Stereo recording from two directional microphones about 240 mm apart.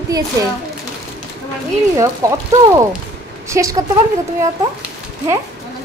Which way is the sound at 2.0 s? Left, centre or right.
Centre.